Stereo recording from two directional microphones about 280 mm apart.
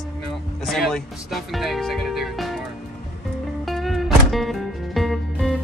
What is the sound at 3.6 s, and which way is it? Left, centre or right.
Music, centre.